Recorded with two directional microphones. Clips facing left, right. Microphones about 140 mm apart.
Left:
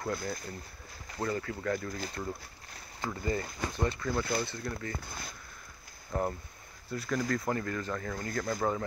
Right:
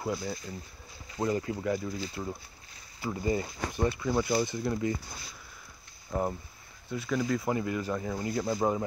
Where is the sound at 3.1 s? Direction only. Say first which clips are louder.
Right 3 dB; 15° right (ahead or behind).